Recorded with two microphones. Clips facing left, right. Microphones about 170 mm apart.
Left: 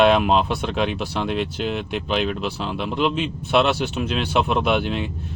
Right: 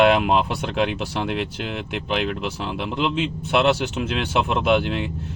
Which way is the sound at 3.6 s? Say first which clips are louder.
Even; 20° right (ahead or behind).